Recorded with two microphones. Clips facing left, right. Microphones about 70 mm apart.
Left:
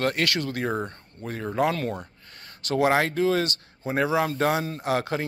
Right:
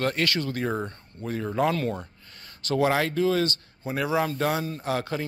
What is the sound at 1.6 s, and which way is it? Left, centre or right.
Speech, left.